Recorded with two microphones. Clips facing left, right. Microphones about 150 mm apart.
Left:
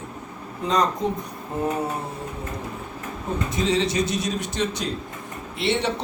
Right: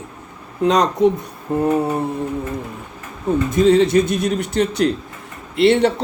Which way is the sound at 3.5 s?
50° right (ahead or behind).